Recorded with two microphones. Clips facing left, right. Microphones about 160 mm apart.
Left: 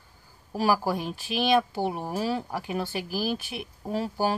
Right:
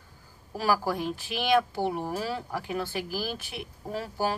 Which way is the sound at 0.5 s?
15° left (ahead or behind).